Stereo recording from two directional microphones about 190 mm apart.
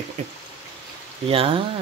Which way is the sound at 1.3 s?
30° right (ahead or behind).